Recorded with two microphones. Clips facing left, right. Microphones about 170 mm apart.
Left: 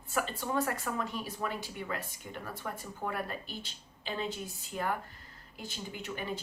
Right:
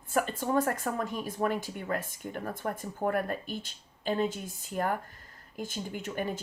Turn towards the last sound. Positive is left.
turn(degrees=-45)  # may be behind; listen again after turning